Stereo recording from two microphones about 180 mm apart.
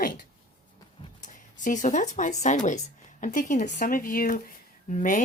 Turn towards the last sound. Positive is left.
turn(degrees=45)  # may be behind; listen again after turning